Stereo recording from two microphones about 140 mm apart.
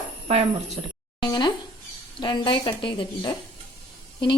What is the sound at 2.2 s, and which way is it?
A woman's voice, 35° left (ahead or behind).